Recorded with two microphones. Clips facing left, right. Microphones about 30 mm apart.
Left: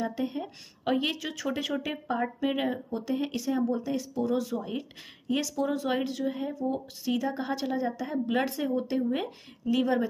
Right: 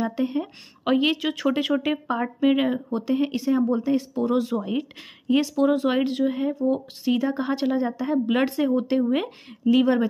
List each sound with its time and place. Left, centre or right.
0.0 s a woman's voice: right
1.1 s speech: right
2.0 s a woman's voice: centre
2.5 s speech: right
3.3 s a woman's voice: centre; by 10.0 s right